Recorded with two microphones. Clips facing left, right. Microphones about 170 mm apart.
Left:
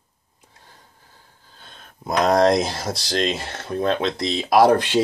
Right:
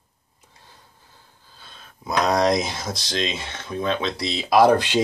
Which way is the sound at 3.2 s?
45° left (ahead or behind).